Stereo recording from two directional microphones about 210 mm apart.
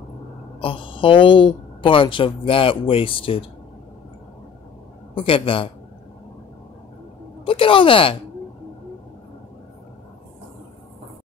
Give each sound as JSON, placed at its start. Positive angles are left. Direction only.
{"t": 0.6, "sound": "speech", "side_deg": 25}
{"t": 5.1, "sound": "speech", "side_deg": 25}
{"t": 7.4, "sound": "speech", "side_deg": 25}